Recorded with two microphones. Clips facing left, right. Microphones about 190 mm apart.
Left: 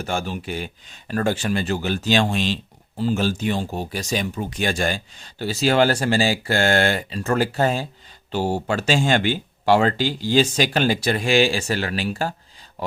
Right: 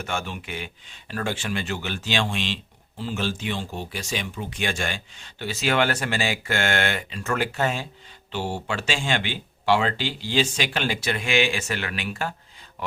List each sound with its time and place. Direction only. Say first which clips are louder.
0.0 s speech: left 4 dB; 35° left (ahead or behind)